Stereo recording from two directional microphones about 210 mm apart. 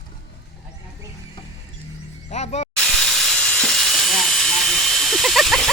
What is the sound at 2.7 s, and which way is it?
Steam, centre (ahead or behind).